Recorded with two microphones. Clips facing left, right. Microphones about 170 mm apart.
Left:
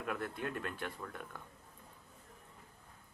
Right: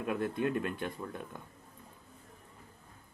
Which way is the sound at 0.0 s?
20° right (ahead or behind).